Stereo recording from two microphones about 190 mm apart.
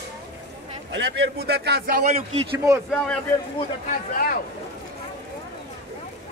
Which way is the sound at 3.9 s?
50° left (ahead or behind).